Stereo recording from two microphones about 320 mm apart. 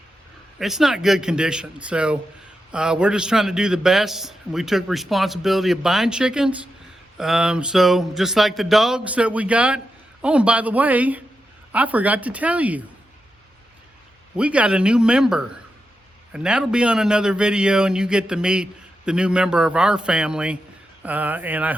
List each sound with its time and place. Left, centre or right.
0.6 s speech: centre
14.3 s speech: centre